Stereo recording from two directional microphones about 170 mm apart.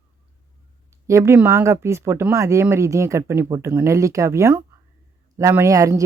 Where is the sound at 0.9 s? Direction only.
15° right (ahead or behind).